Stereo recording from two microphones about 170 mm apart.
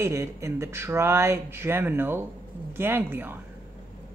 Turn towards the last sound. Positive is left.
turn(degrees=-10)  # may be behind; listen again after turning